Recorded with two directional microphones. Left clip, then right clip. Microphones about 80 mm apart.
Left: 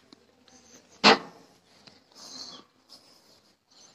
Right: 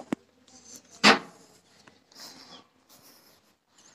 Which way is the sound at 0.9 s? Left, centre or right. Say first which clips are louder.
Even; left.